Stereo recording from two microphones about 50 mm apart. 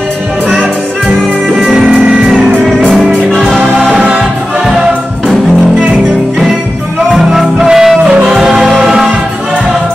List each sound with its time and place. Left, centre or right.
1.6 s music: centre
1.9 s music: right
4.6 s music: centre
7.1 s music: centre
8.1 s music: right
8.4 s music: centre